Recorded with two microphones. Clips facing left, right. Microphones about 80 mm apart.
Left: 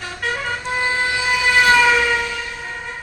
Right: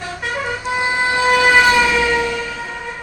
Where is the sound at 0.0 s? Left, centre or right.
Centre.